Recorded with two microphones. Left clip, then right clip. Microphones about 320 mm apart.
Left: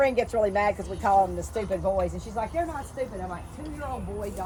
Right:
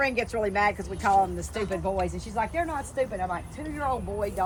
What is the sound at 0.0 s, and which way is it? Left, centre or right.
Speech, centre.